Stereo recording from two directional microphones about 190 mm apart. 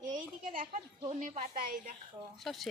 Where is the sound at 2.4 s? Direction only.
Centre (ahead or behind).